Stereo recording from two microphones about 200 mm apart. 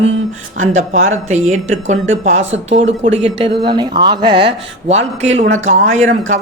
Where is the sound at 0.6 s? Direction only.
40° right (ahead or behind).